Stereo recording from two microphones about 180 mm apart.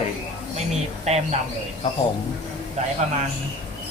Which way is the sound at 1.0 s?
35° right (ahead or behind).